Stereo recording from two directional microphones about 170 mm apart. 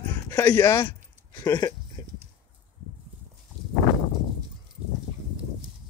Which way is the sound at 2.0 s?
15° left (ahead or behind).